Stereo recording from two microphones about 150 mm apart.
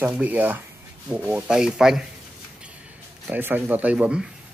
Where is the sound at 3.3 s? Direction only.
10° right (ahead or behind).